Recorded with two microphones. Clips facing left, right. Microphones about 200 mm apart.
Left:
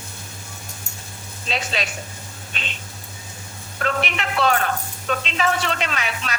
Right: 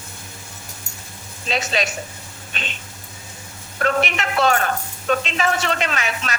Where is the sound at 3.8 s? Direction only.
45° right (ahead or behind).